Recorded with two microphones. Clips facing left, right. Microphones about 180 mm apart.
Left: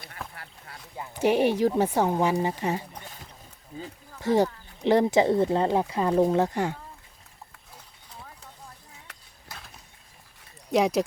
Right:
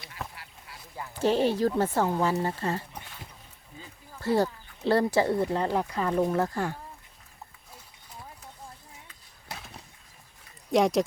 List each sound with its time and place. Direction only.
0.9 s speech: 15° left (ahead or behind)
3.7 s speech: 35° left (ahead or behind)
4.2 s speech: 15° left (ahead or behind)
9.1 s skateboard: 80° left
10.7 s speech: centre (ahead or behind)